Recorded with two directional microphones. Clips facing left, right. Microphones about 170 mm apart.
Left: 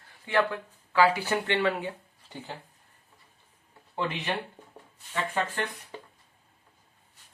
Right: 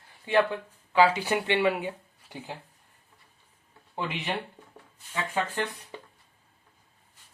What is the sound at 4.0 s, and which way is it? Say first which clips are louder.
Speech: left 1 dB; 15° right (ahead or behind).